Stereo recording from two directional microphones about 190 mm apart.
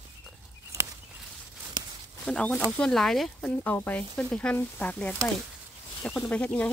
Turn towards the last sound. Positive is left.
turn(degrees=5)  # may be behind; listen again after turning